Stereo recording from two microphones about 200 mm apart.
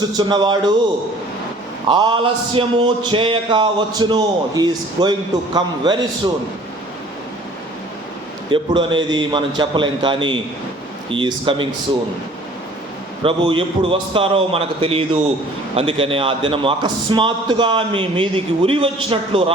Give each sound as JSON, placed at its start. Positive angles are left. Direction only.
{"t": 0.2, "sound": "a man's voice", "side_deg": -20}
{"t": 1.9, "sound": "a man's voice", "side_deg": -25}
{"t": 8.4, "sound": "a man's voice", "side_deg": -25}
{"t": 13.2, "sound": "a man's voice", "side_deg": -25}